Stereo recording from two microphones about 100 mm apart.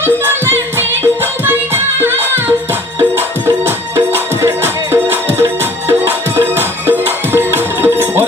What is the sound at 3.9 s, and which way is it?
Music, 25° right (ahead or behind).